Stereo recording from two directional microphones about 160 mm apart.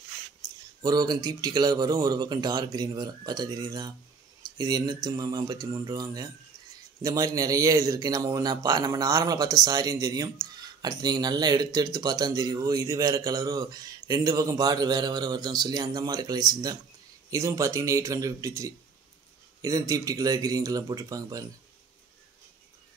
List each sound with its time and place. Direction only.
0.8 s speech: 25° right (ahead or behind)